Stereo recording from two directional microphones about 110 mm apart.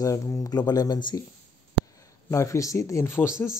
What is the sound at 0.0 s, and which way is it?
Speech, 30° left (ahead or behind).